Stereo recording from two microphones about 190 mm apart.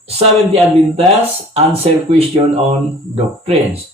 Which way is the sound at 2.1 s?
30° right (ahead or behind).